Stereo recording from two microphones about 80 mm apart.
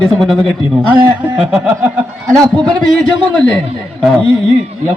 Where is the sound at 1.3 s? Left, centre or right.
Centre.